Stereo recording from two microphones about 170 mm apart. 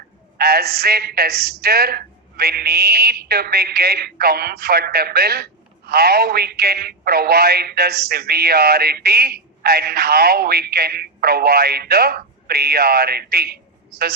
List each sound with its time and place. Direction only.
0.3 s a woman's voice: 65° right (ahead or behind)